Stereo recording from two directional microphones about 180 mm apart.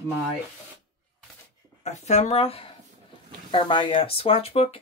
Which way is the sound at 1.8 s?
40° left (ahead or behind).